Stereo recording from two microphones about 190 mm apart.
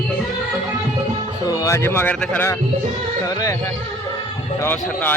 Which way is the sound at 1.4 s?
20° left (ahead or behind).